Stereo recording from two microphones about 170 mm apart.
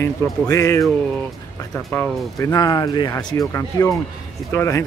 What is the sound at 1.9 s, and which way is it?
Speech, 15° left (ahead or behind).